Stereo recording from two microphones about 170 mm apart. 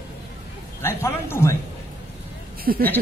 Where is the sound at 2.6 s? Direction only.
60° right (ahead or behind).